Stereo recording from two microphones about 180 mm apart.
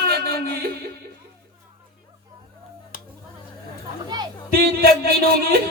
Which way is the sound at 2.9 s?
50° left (ahead or behind).